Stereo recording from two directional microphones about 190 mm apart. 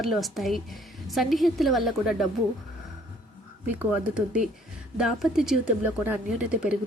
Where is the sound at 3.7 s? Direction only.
5° right (ahead or behind).